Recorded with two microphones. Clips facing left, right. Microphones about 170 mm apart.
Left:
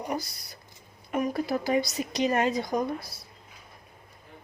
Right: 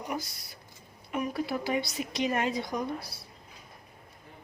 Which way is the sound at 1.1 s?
45° left (ahead or behind).